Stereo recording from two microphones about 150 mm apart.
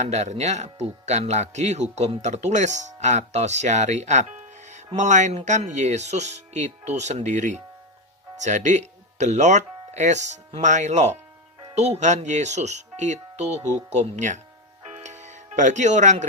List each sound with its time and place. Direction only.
0.0 s speech: 50° right (ahead or behind)
15.0 s music: 50° right (ahead or behind)